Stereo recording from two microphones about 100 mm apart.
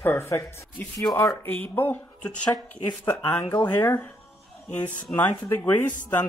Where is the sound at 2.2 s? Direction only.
40° left (ahead or behind).